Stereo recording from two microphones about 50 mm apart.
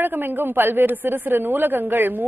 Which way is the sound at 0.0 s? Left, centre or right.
Right.